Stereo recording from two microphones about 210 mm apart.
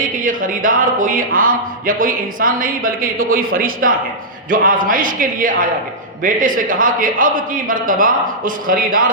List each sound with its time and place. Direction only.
0.0 s a man's voice: 40° right (ahead or behind)